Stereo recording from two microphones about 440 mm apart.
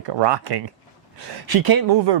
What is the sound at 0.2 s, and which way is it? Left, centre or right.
Speech, right.